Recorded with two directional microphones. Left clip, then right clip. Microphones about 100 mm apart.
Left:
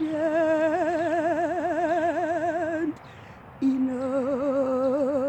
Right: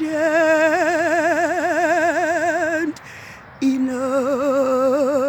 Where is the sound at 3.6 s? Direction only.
30° right (ahead or behind).